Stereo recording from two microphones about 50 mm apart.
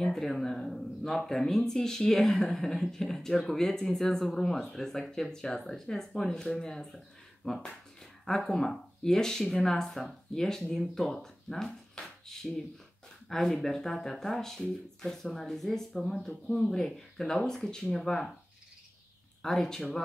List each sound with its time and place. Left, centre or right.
0.1 s speech: centre
7.4 s speech: left
8.5 s speech: centre
19.4 s speech: centre